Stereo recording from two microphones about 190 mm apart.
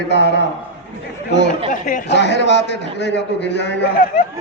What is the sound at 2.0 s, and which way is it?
A man's voice, 65° left (ahead or behind).